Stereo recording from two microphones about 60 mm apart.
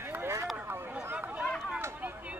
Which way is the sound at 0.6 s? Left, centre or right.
Right.